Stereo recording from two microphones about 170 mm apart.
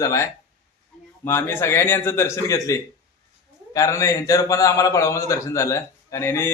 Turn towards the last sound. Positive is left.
turn(degrees=15)  # may be behind; listen again after turning